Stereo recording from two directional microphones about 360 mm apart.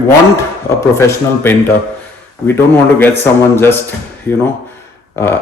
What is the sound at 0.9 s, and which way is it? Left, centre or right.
Speech, centre.